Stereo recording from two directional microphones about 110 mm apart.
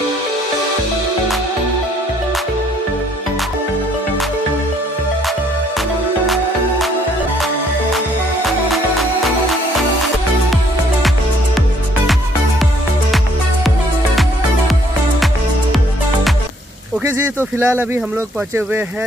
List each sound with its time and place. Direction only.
5.8 s music: centre (ahead or behind)
8.5 s music: centre (ahead or behind)
17.0 s speech: 20° right (ahead or behind)